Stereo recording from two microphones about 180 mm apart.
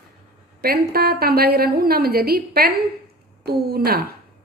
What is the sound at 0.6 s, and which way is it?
A woman's voice, 60° right (ahead or behind).